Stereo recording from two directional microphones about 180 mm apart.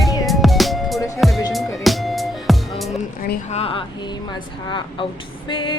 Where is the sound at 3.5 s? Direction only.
30° left (ahead or behind).